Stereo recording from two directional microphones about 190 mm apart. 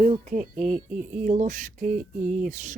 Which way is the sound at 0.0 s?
35° right (ahead or behind).